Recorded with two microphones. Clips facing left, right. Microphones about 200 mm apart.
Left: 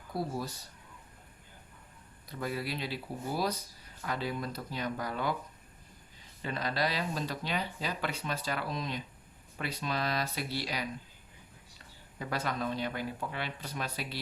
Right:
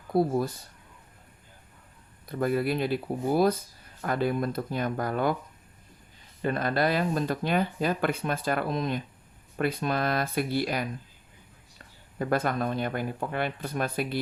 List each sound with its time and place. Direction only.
0.1 s speech: 55° right (ahead or behind)
2.2 s speech: 55° right (ahead or behind)
6.4 s speech: 55° right (ahead or behind)
12.2 s speech: 50° right (ahead or behind)